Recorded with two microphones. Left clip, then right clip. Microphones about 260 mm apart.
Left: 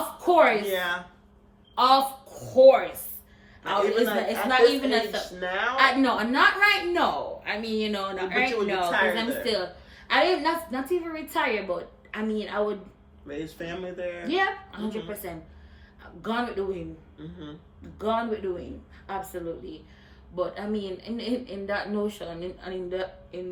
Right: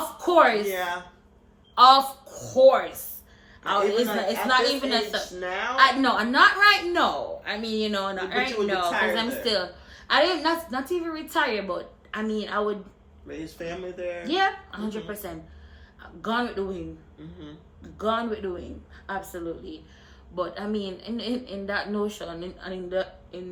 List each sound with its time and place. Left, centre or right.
0.2 s speech: centre
0.7 s speech: centre
1.7 s a woman's voice: centre
5.4 s a woman's voice: centre
13.2 s speech: centre
14.3 s a woman's voice: centre
17.9 s a woman's voice: centre